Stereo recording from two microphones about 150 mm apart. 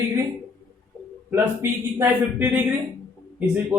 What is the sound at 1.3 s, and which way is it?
A man's voice, 15° right (ahead or behind).